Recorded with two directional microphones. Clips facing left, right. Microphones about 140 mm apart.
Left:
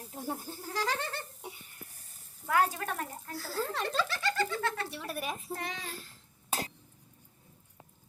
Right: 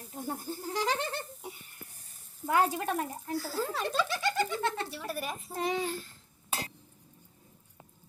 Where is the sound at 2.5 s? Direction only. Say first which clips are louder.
Right 2 dB; 20° right (ahead or behind).